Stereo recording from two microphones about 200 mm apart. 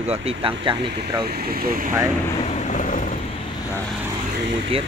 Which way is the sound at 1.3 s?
50° right (ahead or behind).